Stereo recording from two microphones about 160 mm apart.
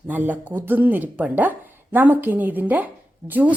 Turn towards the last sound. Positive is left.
turn(degrees=-10)  # may be behind; listen again after turning